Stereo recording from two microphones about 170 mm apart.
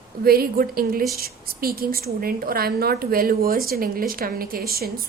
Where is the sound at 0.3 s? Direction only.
60° right (ahead or behind).